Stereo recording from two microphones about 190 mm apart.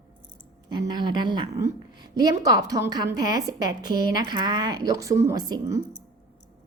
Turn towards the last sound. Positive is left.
turn(degrees=-20)  # may be behind; listen again after turning